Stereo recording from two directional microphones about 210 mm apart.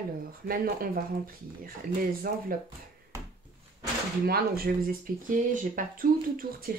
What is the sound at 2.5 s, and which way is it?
Speech, 40° right (ahead or behind).